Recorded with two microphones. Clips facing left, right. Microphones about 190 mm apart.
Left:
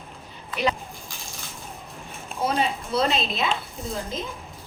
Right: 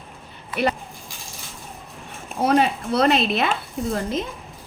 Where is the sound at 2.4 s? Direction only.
65° right (ahead or behind).